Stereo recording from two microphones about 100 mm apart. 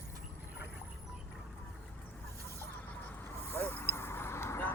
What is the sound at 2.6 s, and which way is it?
Vehicle, 15° left (ahead or behind).